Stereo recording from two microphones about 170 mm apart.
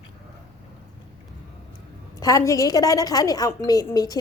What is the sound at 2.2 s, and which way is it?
A woman's voice, 20° left (ahead or behind).